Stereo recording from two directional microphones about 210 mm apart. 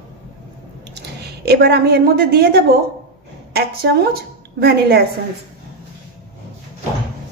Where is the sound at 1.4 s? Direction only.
50° right (ahead or behind).